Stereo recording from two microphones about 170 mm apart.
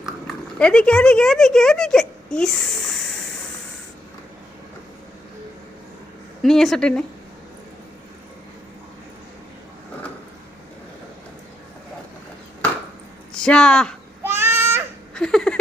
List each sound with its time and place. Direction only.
0.0 s speech: 5° left (ahead or behind)
6.4 s a woman's voice: centre (ahead or behind)
13.3 s speech: 5° left (ahead or behind)
14.3 s baby cry: 15° right (ahead or behind)
15.1 s a sound: 5° left (ahead or behind)